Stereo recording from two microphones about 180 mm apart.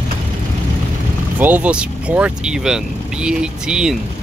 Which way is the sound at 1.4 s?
10° right (ahead or behind).